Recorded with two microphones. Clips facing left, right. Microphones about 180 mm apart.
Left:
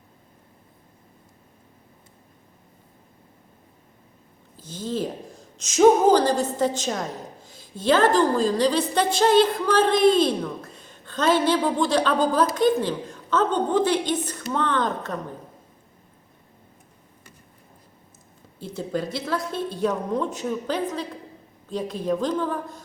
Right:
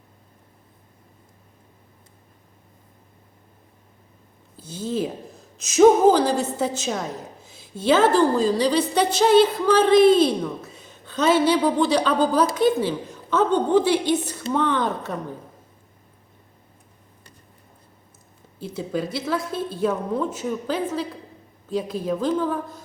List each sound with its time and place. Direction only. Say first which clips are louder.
4.6 s a woman's voice: right 2 dB; 10° right (ahead or behind)
18.6 s a woman's voice: right 1 dB; 5° right (ahead or behind)